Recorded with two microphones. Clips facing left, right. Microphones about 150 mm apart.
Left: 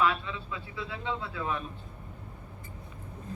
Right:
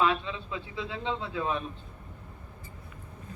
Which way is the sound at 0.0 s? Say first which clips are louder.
Right 1 dB; 20° right (ahead or behind).